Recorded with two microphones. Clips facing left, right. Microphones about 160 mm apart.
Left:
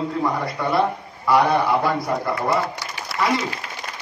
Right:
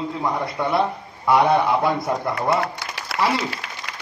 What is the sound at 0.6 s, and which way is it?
A man's voice, 25° right (ahead or behind).